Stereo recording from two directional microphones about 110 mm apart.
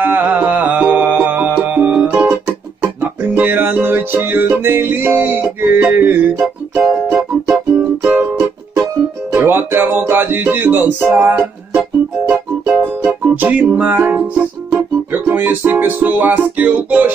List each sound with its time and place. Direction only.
0.0 s music: 15° right (ahead or behind)
6.4 s music: 5° right (ahead or behind)
8.0 s music: 15° right (ahead or behind)
9.3 s music: 20° right (ahead or behind)
15.2 s music: 15° right (ahead or behind)